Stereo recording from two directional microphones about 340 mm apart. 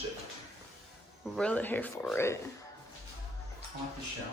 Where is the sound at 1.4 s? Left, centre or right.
Centre.